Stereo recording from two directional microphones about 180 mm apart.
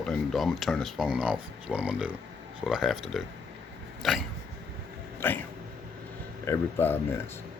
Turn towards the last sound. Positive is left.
turn(degrees=15)  # may be behind; listen again after turning